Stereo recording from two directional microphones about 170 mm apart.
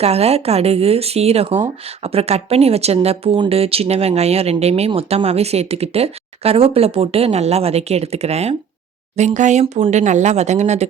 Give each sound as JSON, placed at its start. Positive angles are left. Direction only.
{"t": 0.0, "sound": "speech", "side_deg": -35}